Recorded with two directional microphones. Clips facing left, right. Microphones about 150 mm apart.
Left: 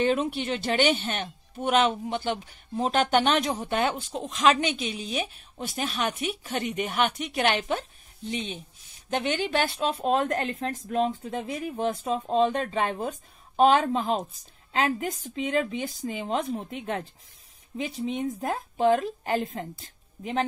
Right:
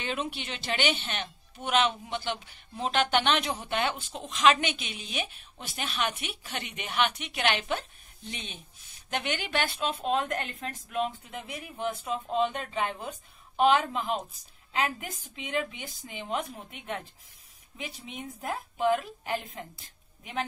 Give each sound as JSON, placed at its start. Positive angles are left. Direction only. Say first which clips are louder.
{"t": 0.0, "sound": "speech", "louder": "left 9 dB", "side_deg": 45}